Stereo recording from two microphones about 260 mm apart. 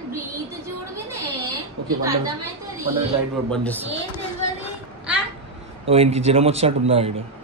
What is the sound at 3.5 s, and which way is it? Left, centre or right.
Speech, centre.